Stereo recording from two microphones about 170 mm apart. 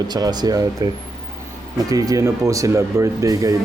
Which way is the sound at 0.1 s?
25° right (ahead or behind).